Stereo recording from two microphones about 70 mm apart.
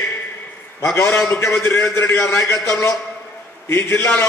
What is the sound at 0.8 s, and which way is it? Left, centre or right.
A man's voice, left.